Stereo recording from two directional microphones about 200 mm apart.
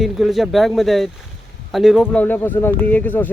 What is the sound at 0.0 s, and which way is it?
Speech, centre (ahead or behind).